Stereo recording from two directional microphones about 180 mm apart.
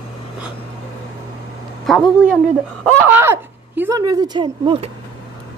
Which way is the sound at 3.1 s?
10° right (ahead or behind).